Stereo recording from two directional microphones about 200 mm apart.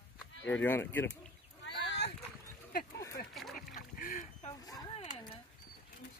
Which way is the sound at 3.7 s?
40° left (ahead or behind).